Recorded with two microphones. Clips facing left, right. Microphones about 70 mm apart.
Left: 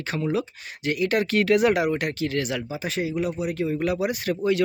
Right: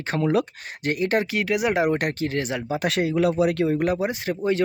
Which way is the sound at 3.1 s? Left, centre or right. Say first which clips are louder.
Right 6 dB; right.